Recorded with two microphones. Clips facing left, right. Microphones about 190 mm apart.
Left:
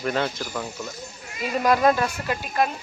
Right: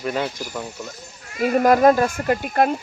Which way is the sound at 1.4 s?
50° right (ahead or behind).